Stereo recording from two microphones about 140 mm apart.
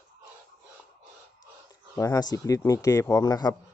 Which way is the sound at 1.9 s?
25° left (ahead or behind).